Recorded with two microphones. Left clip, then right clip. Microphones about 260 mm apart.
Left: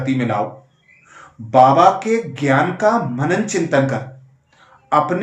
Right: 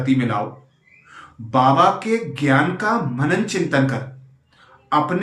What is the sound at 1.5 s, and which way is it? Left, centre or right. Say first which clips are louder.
Speech: left 4 dB; centre.